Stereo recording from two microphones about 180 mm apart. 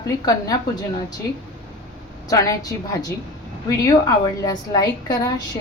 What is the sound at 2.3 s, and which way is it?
A woman's voice, 20° left (ahead or behind).